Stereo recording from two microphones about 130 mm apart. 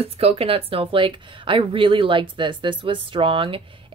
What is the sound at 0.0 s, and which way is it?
Speech, 50° right (ahead or behind).